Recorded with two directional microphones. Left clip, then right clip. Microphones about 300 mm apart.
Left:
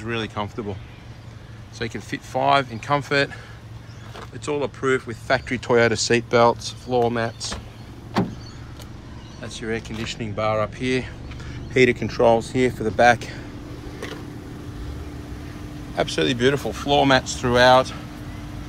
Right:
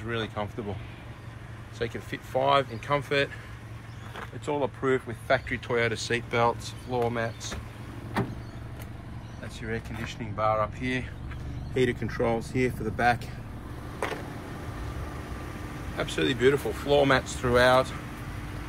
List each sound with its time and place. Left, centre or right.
0.0 s speech: centre
1.8 s speech: centre
4.5 s speech: centre
5.5 s speech: centre
9.5 s speech: centre
16.0 s speech: centre